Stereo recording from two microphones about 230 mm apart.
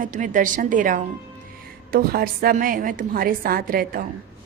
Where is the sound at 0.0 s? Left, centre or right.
Right.